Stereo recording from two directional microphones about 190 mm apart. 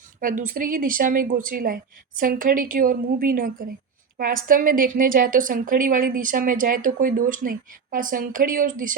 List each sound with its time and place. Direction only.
0.2 s a woman's voice: 45° right (ahead or behind)